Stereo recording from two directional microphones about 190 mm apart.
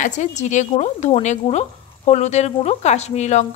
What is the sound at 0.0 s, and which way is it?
A woman's voice, 40° left (ahead or behind).